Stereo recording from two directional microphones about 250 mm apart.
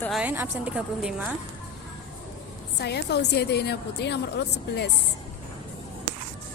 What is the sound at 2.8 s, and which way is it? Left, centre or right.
A woman's voice, left.